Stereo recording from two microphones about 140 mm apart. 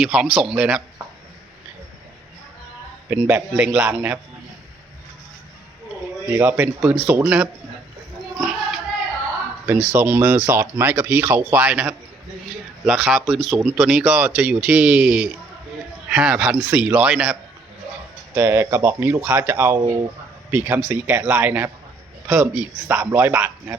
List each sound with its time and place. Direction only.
0.0 s speech: 5° right (ahead or behind)
3.1 s speech: 15° right (ahead or behind)
6.3 s speech: 15° right (ahead or behind)
9.6 s speech: 10° right (ahead or behind)
18.3 s speech: 15° right (ahead or behind)